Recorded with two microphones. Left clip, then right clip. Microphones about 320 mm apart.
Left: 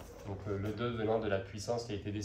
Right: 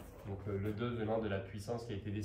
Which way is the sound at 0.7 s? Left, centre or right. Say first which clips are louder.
Left 5 dB; centre.